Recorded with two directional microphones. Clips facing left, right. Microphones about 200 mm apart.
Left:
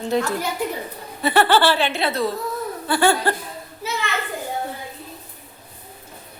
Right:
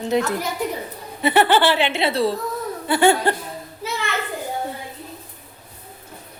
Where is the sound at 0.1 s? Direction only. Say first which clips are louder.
Right 1 dB; 20° right (ahead or behind).